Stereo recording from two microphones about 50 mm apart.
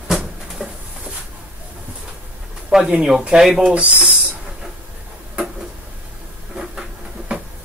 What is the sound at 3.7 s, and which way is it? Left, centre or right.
Speech, right.